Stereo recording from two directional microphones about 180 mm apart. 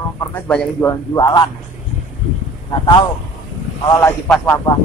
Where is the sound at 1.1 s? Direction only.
20° left (ahead or behind).